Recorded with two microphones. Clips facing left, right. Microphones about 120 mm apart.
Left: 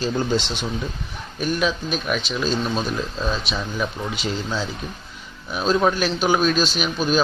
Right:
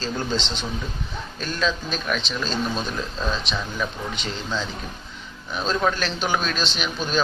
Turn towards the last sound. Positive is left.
turn(degrees=5)  # may be behind; listen again after turning